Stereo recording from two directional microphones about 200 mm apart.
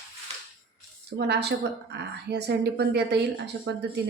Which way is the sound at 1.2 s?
55° right (ahead or behind).